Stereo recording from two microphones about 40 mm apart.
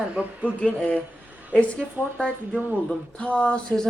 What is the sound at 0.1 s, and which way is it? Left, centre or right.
Speech, right.